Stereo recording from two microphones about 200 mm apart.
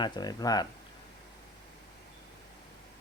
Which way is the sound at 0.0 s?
20° left (ahead or behind).